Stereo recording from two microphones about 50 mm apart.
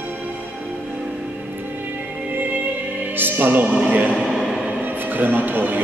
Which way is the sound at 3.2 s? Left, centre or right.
Right.